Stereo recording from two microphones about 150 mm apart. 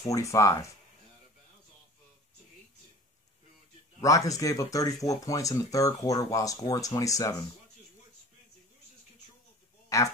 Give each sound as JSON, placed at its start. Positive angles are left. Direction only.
{"t": 0.0, "sound": "speech", "side_deg": 20}
{"t": 4.0, "sound": "speech", "side_deg": 20}
{"t": 9.9, "sound": "speech", "side_deg": 20}